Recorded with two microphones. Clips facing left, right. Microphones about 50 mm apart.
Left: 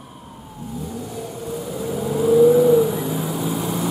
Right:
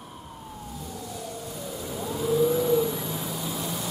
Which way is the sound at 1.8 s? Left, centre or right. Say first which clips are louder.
Left 9 dB; centre.